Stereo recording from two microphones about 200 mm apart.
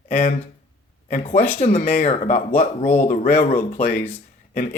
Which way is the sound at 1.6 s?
40° left (ahead or behind).